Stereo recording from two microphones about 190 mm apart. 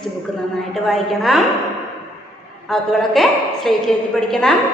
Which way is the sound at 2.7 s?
Centre (ahead or behind).